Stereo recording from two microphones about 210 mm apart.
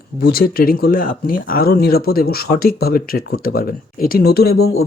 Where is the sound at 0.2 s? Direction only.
45° left (ahead or behind).